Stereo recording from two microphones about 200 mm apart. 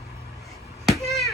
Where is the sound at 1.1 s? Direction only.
Centre (ahead or behind).